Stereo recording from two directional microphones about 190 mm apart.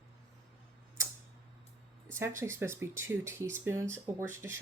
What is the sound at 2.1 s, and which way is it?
Speech, 15° right (ahead or behind).